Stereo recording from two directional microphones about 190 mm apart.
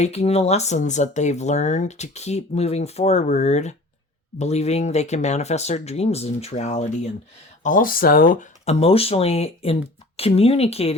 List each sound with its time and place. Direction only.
0.0 s speech: 35° left (ahead or behind)